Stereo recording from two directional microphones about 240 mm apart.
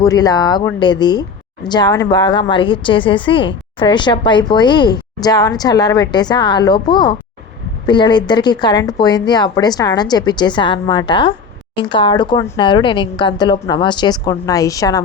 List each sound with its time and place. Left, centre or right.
0.0 s a woman's voice: centre